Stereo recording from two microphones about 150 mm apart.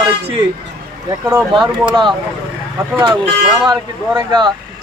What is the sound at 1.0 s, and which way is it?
Speech, 15° right (ahead or behind).